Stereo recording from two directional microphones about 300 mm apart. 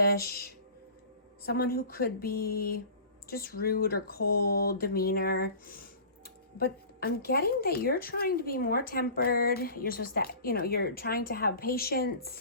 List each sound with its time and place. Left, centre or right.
0.0 s speech: left